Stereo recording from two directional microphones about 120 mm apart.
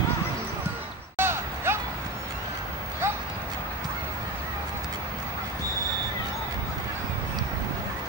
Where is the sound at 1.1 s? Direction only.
20° right (ahead or behind).